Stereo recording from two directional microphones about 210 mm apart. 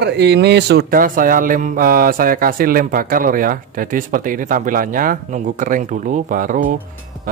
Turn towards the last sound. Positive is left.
turn(degrees=-40)  # may be behind; listen again after turning